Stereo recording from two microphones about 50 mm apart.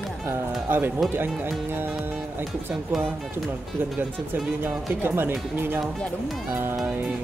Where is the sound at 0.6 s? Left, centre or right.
Right.